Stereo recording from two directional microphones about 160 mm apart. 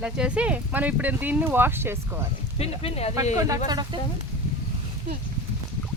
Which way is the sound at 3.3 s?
20° right (ahead or behind).